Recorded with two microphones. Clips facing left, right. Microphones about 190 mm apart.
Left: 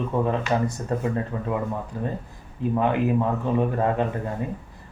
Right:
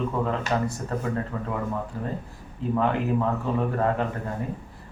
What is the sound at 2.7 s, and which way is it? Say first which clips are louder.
Speech: left 2 dB; 15° left (ahead or behind).